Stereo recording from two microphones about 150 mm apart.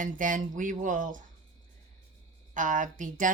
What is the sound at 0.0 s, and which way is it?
Speech, 60° right (ahead or behind).